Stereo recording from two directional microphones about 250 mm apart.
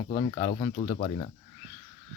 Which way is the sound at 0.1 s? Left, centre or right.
Left.